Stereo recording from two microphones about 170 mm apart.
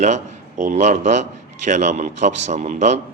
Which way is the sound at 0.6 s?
45° right (ahead or behind).